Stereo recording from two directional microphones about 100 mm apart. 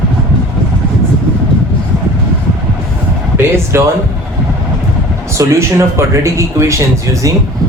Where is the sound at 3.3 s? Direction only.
25° right (ahead or behind).